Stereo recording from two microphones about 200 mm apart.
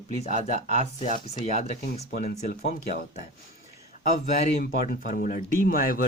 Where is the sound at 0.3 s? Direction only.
35° right (ahead or behind).